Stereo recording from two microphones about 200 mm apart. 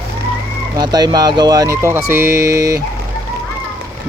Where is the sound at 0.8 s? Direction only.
20° right (ahead or behind).